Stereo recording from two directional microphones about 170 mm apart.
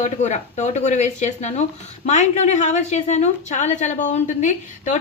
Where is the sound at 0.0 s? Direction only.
45° left (ahead or behind).